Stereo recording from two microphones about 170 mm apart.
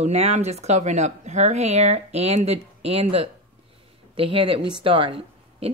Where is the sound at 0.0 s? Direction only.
40° right (ahead or behind).